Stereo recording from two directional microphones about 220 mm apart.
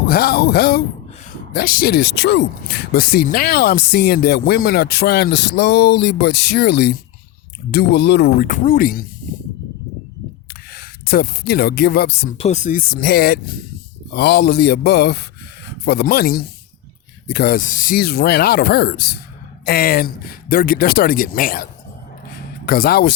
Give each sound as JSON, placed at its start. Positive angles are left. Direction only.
{"t": 0.1, "sound": "speech", "side_deg": 45}
{"t": 8.4, "sound": "speech", "side_deg": 35}
{"t": 10.5, "sound": "speech", "side_deg": 45}
{"t": 12.4, "sound": "speech", "side_deg": 30}